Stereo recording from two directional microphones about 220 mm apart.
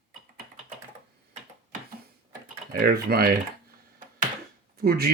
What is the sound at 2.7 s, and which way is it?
Speech, 40° right (ahead or behind).